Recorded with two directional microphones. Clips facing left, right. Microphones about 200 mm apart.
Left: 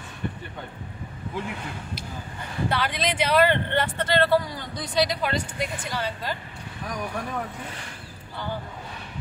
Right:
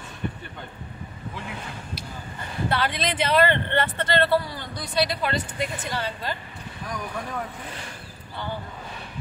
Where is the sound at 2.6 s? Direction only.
10° left (ahead or behind).